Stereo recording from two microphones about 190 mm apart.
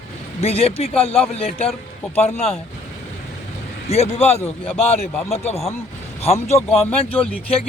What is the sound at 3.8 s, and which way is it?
Speech, 35° left (ahead or behind).